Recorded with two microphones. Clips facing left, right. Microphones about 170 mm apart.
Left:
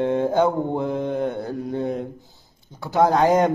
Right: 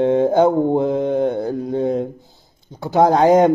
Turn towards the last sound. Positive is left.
turn(degrees=-20)  # may be behind; listen again after turning